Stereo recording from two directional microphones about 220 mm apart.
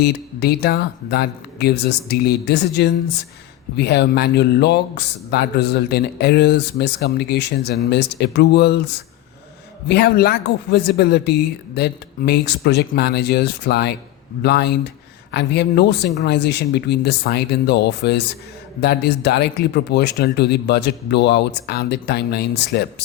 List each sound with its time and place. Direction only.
0.0 s speech: 45° left (ahead or behind)
9.9 s speech: 45° left (ahead or behind)